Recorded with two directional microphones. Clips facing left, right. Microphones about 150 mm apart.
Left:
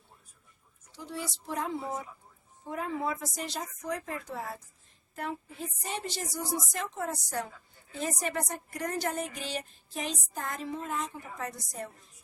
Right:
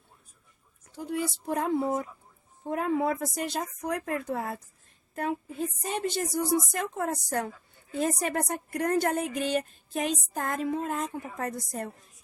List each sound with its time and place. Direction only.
0.9 s music: 50° right (ahead or behind)
2.6 s a woman's voice: 55° right (ahead or behind)
5.9 s music: 55° right (ahead or behind)
8.0 s a woman's voice: 50° right (ahead or behind)
9.3 s music: 55° right (ahead or behind)